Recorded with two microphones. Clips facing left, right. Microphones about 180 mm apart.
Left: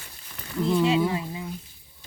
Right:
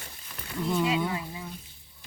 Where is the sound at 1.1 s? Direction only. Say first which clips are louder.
Left 4 dB; 25° left (ahead or behind).